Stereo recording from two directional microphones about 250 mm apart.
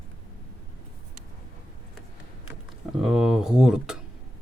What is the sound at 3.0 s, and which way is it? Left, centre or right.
Speech, centre.